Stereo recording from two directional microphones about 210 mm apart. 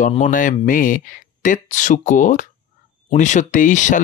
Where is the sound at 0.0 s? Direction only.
35° left (ahead or behind).